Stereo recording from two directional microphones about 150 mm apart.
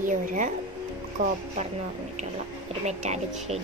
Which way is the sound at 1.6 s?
50° right (ahead or behind).